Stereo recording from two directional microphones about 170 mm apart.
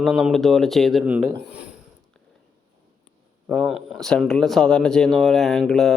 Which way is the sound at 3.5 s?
Centre (ahead or behind).